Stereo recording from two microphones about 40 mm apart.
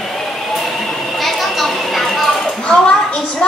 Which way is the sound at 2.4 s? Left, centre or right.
Left.